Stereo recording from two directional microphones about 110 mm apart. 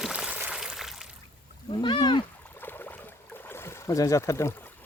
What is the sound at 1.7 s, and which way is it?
Speech, 45° left (ahead or behind).